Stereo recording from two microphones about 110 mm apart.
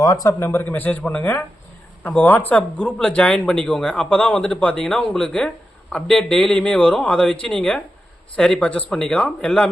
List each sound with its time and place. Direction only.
0.0 s speech: 30° left (ahead or behind); by 9.6 s 10° left (ahead or behind)